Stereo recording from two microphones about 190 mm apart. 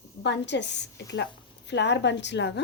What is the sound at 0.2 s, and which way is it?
A woman's voice, 65° left (ahead or behind).